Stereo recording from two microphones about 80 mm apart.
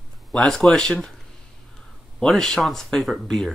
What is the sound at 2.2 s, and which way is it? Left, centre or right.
Speech, centre.